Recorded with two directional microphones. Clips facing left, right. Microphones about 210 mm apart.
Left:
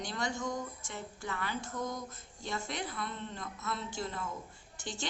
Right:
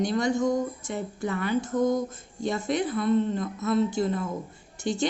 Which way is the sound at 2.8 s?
30° right (ahead or behind).